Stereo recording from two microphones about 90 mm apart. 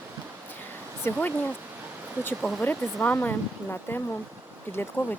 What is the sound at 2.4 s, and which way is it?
Speech, 5° left (ahead or behind).